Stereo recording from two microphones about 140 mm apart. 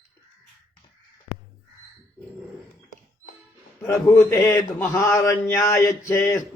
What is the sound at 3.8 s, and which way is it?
A man's voice, 20° left (ahead or behind).